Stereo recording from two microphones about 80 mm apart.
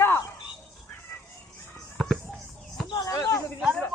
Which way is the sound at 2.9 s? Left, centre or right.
Left.